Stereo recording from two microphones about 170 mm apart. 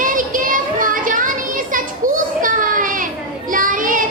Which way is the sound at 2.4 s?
55° right (ahead or behind).